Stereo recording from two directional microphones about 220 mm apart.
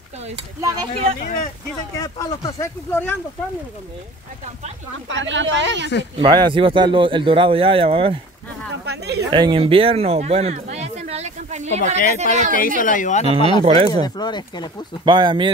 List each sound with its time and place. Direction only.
0.6 s a man's voice: 20° right (ahead or behind)
2.0 s speech: 15° left (ahead or behind)
5.1 s speech: 55° right (ahead or behind)
6.1 s a man's voice: 20° right (ahead or behind)
8.8 s speech: 50° right (ahead or behind)
9.3 s speech: 20° right (ahead or behind)
12.5 s speech: 40° left (ahead or behind)
13.4 s speech: 20° left (ahead or behind)
13.7 s a man's voice: 25° right (ahead or behind)
14.0 s speech: 20° left (ahead or behind)
15.0 s a man's voice: 20° right (ahead or behind)